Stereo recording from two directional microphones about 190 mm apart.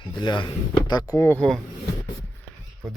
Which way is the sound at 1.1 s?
10° left (ahead or behind).